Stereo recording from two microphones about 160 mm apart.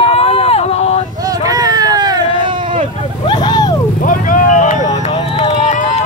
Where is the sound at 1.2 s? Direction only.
20° right (ahead or behind).